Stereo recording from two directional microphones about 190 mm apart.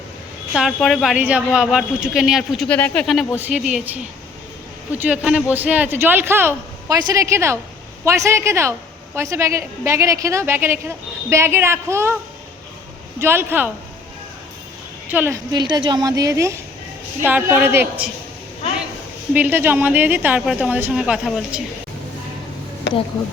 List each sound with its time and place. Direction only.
0.5 s a woman's voice: centre (ahead or behind)
3.3 s a woman's voice: 10° right (ahead or behind)
13.1 s a woman's voice: 15° right (ahead or behind)
15.1 s a woman's voice: 10° right (ahead or behind)
15.5 s a woman's voice: 25° right (ahead or behind)
19.3 s a woman's voice: 10° right (ahead or behind)